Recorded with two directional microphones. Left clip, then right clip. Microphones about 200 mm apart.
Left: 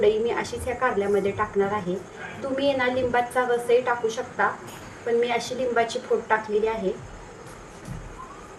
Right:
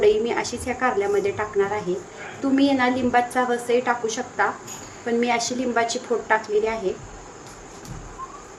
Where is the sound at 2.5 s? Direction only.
40° right (ahead or behind).